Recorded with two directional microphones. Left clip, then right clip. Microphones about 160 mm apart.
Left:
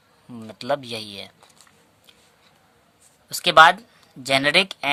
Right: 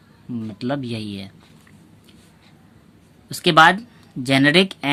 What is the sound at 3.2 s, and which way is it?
Speech, 30° left (ahead or behind).